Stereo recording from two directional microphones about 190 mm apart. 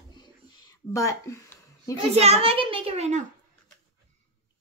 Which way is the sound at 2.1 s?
35° right (ahead or behind).